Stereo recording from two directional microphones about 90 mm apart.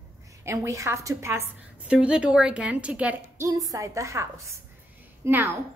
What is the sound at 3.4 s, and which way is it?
A woman's voice, 40° right (ahead or behind).